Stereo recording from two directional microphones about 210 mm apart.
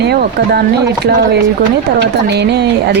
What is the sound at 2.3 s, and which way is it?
Speech, 50° right (ahead or behind).